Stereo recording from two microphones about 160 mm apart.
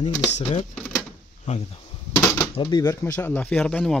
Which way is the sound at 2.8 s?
15° left (ahead or behind).